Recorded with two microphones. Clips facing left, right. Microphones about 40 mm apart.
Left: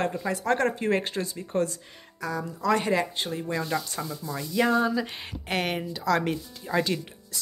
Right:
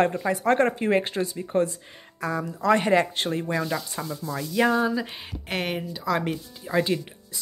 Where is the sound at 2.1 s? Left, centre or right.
Right.